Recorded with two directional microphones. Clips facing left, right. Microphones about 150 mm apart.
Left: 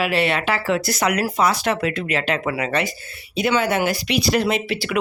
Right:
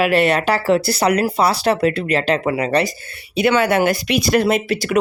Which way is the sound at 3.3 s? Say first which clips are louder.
Right 4 dB; 65° right (ahead or behind).